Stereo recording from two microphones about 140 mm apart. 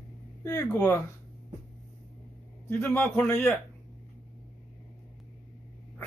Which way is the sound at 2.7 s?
15° left (ahead or behind).